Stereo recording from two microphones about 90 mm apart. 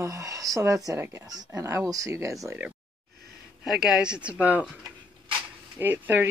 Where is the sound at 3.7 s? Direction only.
10° right (ahead or behind).